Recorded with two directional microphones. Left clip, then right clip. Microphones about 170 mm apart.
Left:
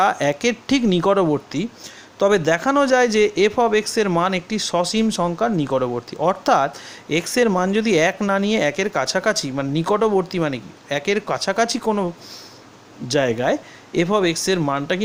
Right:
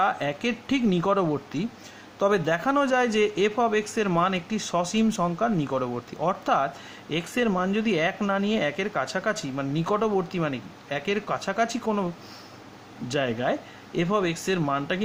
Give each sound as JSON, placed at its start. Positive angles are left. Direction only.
{"t": 0.0, "sound": "speech", "side_deg": 40}